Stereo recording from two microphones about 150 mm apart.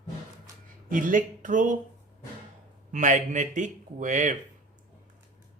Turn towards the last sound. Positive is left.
turn(degrees=-55)  # may be behind; listen again after turning